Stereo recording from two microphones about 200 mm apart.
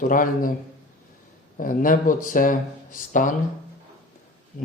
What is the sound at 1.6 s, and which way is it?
Speech, 45° left (ahead or behind).